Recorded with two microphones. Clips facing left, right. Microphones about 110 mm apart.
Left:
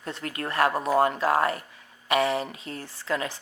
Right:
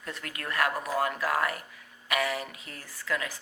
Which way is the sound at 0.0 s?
30° left (ahead or behind).